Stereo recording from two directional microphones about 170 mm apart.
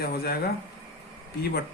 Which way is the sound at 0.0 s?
65° left (ahead or behind).